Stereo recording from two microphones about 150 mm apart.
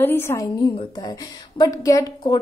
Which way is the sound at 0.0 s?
15° left (ahead or behind).